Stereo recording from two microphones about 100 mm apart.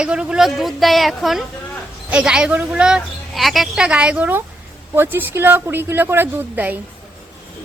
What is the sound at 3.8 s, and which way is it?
A woman's voice, 10° right (ahead or behind).